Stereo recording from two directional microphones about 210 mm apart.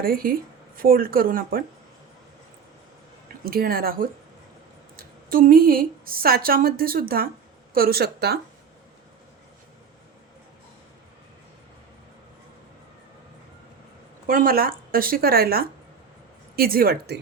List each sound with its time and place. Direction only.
0.0 s a woman's voice: 45° right (ahead or behind)
3.4 s a woman's voice: 45° right (ahead or behind)
14.3 s a woman's voice: 45° right (ahead or behind)